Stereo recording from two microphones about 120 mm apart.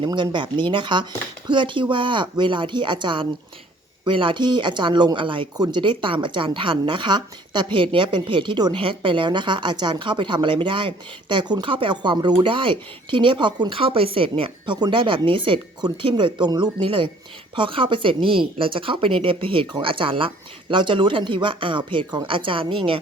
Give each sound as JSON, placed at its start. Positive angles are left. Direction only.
{"t": 0.0, "sound": "speech", "side_deg": -40}